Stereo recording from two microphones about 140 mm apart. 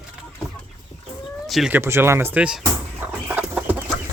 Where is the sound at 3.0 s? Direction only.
10° right (ahead or behind).